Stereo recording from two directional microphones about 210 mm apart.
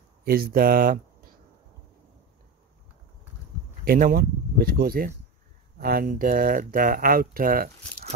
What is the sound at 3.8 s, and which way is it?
Speech, 45° right (ahead or behind).